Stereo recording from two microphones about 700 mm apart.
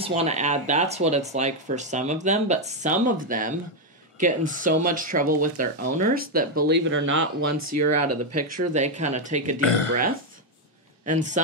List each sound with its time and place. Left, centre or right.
0.0 s speech: centre
8.7 s speech: centre
9.6 s speech: left
11.1 s speech: centre